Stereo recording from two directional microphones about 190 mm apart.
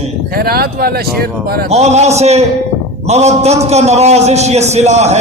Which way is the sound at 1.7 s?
35° right (ahead or behind).